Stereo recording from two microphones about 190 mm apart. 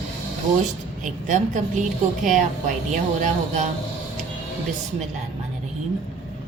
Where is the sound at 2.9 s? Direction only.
45° right (ahead or behind).